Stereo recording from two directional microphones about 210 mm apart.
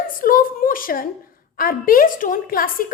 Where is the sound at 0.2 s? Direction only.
40° left (ahead or behind).